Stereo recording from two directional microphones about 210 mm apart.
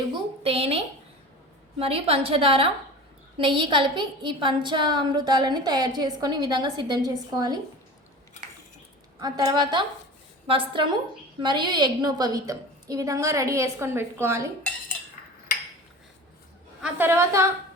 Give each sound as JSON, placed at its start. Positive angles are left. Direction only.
{"t": 0.1, "sound": "a sound", "side_deg": -25}
{"t": 1.8, "sound": "a woman's voice", "side_deg": -25}
{"t": 9.2, "sound": "a woman's voice", "side_deg": -20}
{"t": 16.8, "sound": "a woman's voice", "side_deg": -10}